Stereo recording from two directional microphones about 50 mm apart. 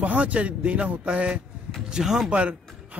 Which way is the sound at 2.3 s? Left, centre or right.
Right.